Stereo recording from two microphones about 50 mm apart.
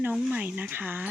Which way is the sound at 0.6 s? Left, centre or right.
Right.